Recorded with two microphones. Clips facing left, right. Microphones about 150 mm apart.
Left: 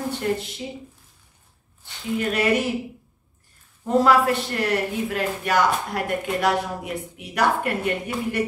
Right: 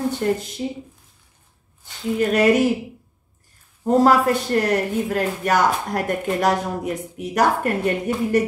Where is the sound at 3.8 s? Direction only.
40° right (ahead or behind).